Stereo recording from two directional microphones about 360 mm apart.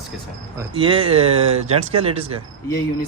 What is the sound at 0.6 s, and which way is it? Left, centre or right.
Speech, centre.